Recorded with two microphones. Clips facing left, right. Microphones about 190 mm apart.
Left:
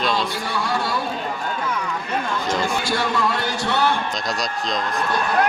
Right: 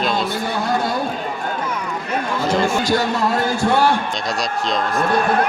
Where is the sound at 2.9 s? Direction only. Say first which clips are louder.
Right 4 dB; 45° right (ahead or behind).